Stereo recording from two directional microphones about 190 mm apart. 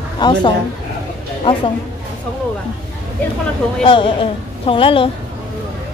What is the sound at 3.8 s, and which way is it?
Speech, 25° left (ahead or behind).